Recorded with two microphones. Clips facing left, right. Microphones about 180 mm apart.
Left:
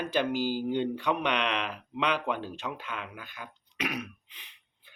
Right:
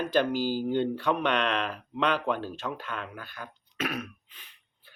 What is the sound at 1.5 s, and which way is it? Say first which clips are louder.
Speech: right 3 dB; 45° right (ahead or behind).